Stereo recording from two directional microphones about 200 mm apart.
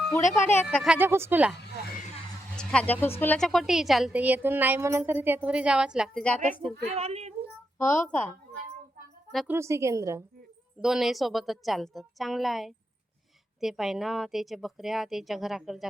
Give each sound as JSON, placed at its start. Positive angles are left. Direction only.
{"t": 0.3, "sound": "speech", "side_deg": 10}
{"t": 0.9, "sound": "a woman's voice", "side_deg": -10}
{"t": 2.6, "sound": "a woman's voice", "side_deg": 5}
{"t": 6.8, "sound": "a child's voice", "side_deg": -30}
{"t": 8.0, "sound": "speech", "side_deg": 5}
{"t": 9.3, "sound": "speech", "side_deg": 0}
{"t": 9.6, "sound": "a woman's voice", "side_deg": -15}
{"t": 10.8, "sound": "a woman's voice", "side_deg": 0}